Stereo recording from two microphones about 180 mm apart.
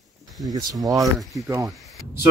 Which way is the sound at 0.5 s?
20° right (ahead or behind).